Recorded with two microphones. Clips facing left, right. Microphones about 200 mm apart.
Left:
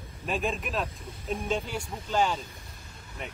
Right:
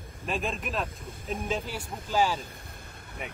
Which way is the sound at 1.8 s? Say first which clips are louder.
Even; 50° right (ahead or behind).